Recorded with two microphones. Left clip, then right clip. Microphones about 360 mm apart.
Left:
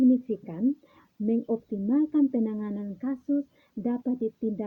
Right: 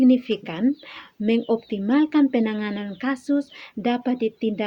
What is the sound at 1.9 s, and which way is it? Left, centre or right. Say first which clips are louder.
Speech: right 6 dB; left.